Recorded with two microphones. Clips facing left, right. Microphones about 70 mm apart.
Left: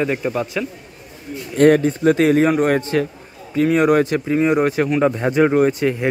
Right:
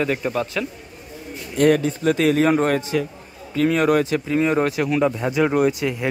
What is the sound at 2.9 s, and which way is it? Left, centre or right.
Speech, left.